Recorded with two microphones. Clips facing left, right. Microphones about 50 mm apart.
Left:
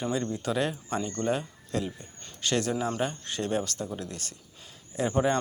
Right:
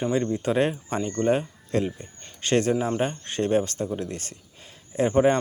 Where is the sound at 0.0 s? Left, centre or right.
Right.